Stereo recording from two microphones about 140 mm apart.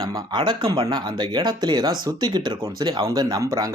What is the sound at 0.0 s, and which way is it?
Speech, 25° right (ahead or behind).